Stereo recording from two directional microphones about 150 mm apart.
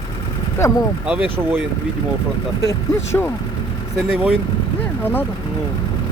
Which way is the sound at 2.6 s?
15° left (ahead or behind).